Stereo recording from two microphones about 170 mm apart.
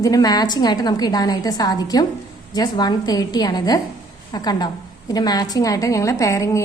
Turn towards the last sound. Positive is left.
turn(degrees=20)  # may be behind; listen again after turning